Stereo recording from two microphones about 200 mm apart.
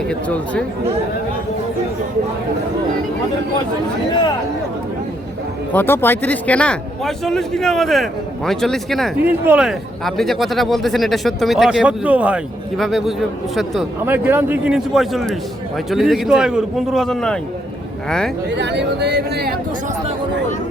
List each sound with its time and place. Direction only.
0.1 s speech: 5° left (ahead or behind)
5.7 s a man's voice: 10° left (ahead or behind)
18.5 s speech: 60° right (ahead or behind)